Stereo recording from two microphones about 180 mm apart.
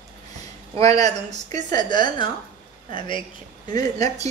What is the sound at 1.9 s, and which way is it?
Speech, 25° left (ahead or behind).